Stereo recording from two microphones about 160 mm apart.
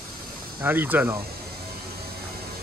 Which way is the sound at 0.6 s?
10° right (ahead or behind).